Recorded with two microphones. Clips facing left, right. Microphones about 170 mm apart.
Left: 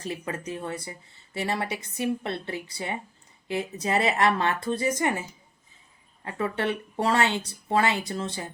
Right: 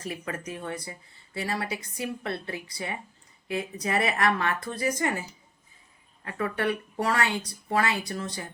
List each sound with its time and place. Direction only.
0.0 s speech: 25° left (ahead or behind)
6.2 s speech: 25° left (ahead or behind)